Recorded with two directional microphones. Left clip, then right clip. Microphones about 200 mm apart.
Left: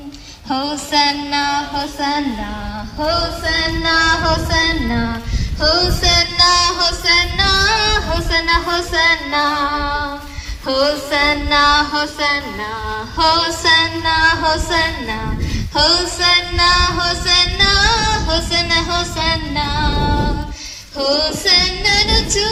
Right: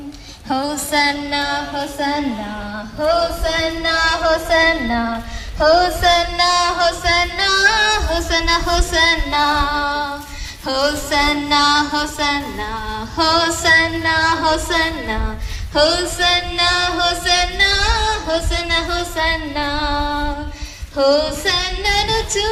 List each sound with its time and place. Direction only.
0.4 s child singing: 15° right (ahead or behind)
3.0 s female singing: 15° right (ahead or behind)
7.3 s music: 20° right (ahead or behind); by 15.1 s 40° right (ahead or behind)
15.7 s male singing: 30° right (ahead or behind)
18.3 s female singing: 10° right (ahead or behind)
21.0 s female singing: 15° right (ahead or behind)